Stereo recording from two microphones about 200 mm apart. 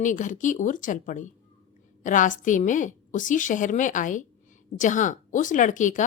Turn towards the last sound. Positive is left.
turn(degrees=40)  # may be behind; listen again after turning